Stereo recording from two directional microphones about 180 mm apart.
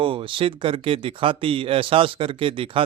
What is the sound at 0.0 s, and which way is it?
Speech, 30° right (ahead or behind).